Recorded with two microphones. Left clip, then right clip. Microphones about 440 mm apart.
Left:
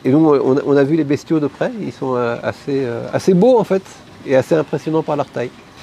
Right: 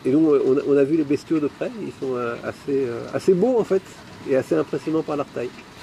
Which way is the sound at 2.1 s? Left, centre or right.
Left.